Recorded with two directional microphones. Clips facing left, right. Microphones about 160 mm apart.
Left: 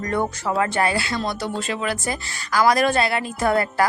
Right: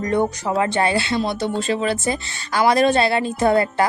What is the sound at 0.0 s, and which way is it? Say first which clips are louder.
A woman's voice: right 4 dB; 20° right (ahead or behind).